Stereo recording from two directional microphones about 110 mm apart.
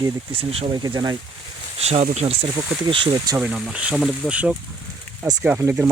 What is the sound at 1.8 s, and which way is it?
Speech, 85° right.